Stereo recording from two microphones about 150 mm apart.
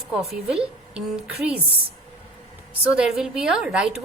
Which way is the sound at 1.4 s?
10° right (ahead or behind).